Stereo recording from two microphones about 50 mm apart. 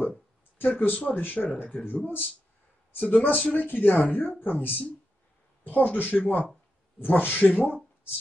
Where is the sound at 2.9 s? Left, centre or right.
Left.